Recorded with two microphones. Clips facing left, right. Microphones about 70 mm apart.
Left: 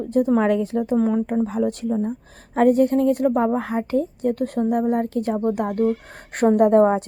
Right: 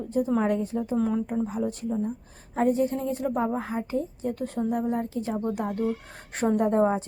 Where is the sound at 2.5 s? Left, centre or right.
Left.